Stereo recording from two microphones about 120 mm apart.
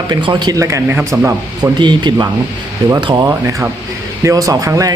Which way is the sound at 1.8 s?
40° right (ahead or behind).